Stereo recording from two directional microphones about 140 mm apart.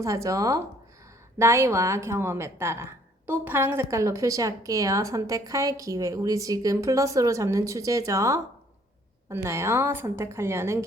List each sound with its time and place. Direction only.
0.0 s a woman's voice: 20° right (ahead or behind)